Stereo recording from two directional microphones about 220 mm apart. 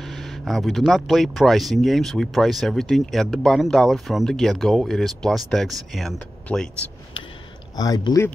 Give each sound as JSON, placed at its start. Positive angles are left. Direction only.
{"t": 0.0, "sound": "speech", "side_deg": 0}
{"t": 7.7, "sound": "speech", "side_deg": 15}